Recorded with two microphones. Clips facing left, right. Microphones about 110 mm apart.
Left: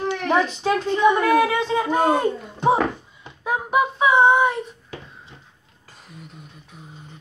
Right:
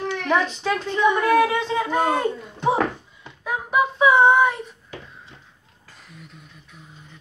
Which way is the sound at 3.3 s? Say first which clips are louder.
Left 3 dB; 20° left (ahead or behind).